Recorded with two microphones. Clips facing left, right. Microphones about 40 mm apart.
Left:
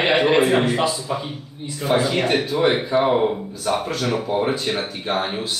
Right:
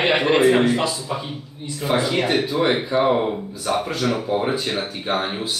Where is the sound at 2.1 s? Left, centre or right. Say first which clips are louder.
Even; centre.